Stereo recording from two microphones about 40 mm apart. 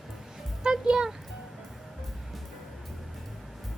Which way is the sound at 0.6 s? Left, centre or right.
Centre.